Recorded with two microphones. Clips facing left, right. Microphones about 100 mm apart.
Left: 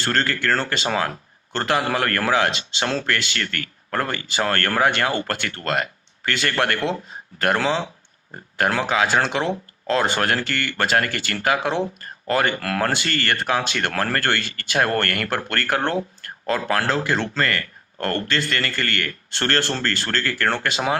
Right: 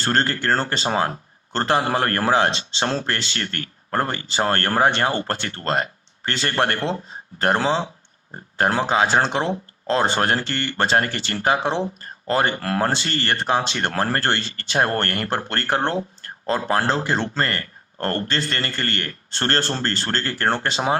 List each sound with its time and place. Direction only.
0.0 s a man's voice: 35° right (ahead or behind)